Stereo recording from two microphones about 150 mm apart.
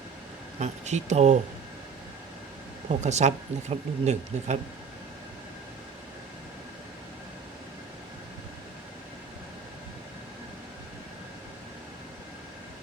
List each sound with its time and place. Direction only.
0.6 s speech: 50° right (ahead or behind)
3.0 s speech: 50° right (ahead or behind)